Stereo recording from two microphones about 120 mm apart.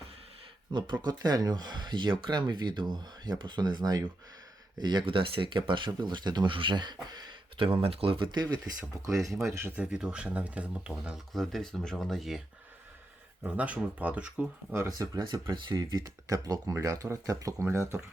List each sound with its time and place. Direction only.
0.7 s speech: 40° right (ahead or behind)
9.3 s speech: centre (ahead or behind)
9.6 s speech: 15° right (ahead or behind)
13.4 s speech: 10° right (ahead or behind)
14.7 s speech: 20° right (ahead or behind)
15.1 s speech: 40° right (ahead or behind); by 18.0 s 20° right (ahead or behind)